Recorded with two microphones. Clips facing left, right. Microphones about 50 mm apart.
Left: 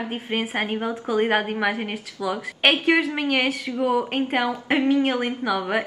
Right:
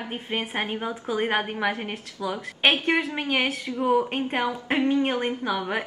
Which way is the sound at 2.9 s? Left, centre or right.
Left.